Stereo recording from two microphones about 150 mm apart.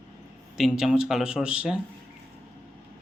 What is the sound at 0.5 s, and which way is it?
Speech, centre (ahead or behind).